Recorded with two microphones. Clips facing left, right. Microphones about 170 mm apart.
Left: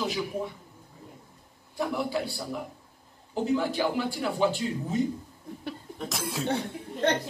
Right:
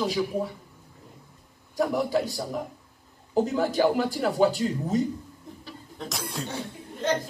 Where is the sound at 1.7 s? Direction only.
40° right (ahead or behind).